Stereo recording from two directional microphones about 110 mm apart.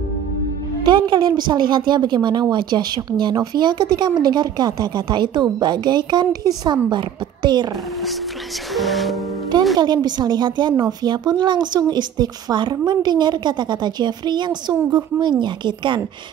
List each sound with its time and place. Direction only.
0.8 s a woman's voice: 40° right (ahead or behind)
8.7 s music: centre (ahead or behind)
9.8 s a woman's voice: 40° right (ahead or behind)